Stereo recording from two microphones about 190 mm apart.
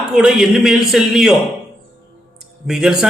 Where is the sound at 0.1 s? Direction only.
5° right (ahead or behind).